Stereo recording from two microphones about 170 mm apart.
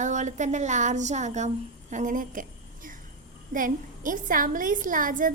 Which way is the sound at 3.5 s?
50° right (ahead or behind).